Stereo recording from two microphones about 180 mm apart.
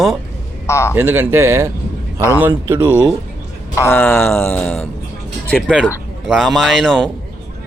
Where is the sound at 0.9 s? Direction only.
10° right (ahead or behind).